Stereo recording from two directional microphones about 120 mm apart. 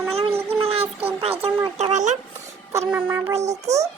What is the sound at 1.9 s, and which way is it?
Speech, 80° right.